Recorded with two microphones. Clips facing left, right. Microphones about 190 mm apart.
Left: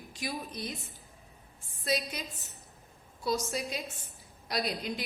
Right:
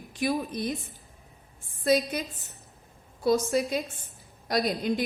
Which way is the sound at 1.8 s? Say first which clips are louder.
Right 9 dB; 50° right (ahead or behind).